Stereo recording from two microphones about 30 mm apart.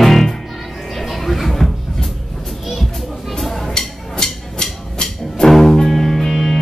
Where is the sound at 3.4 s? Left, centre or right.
Centre.